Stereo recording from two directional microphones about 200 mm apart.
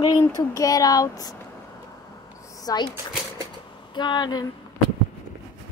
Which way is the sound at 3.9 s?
20° left (ahead or behind).